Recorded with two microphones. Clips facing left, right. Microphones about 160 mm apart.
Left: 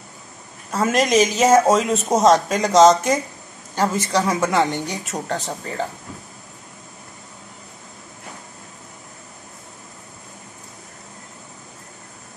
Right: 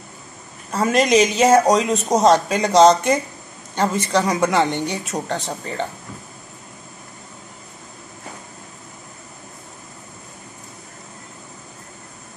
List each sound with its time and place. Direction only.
0.7 s speech: centre (ahead or behind)